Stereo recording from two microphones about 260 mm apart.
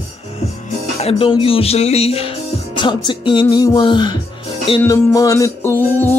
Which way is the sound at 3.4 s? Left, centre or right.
Centre.